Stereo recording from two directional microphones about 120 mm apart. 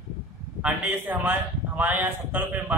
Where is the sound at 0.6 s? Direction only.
10° right (ahead or behind).